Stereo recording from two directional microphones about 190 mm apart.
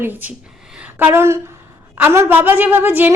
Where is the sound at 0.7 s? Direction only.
5° right (ahead or behind).